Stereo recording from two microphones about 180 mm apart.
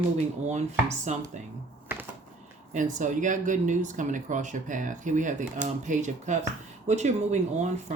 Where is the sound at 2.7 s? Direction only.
45° right (ahead or behind).